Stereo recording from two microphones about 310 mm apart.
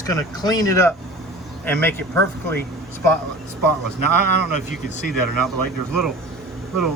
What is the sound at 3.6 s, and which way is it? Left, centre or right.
Speech, left.